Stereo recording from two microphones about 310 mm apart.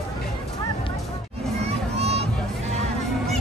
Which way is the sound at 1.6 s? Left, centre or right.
Centre.